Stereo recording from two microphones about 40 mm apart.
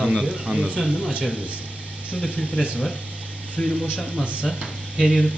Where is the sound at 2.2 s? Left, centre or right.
Left.